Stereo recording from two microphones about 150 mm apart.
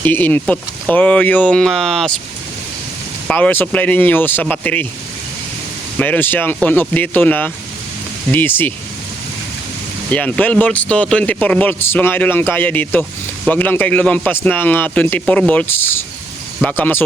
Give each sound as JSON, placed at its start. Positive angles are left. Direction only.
{"t": 0.0, "sound": "a man's voice", "side_deg": 10}
{"t": 3.2, "sound": "a man's voice", "side_deg": 10}
{"t": 6.0, "sound": "a man's voice", "side_deg": 10}
{"t": 10.1, "sound": "a man's voice", "side_deg": 10}